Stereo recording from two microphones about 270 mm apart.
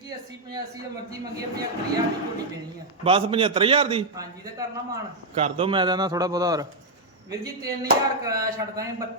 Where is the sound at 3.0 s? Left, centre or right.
Centre.